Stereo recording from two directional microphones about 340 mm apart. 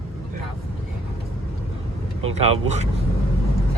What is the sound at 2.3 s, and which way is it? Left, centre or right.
Speech, centre.